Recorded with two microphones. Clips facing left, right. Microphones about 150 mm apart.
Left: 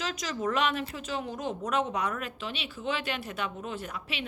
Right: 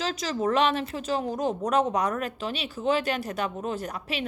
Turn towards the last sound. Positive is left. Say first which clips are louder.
# right 5 dB
turn(degrees=-40)  # may be behind; listen again after turning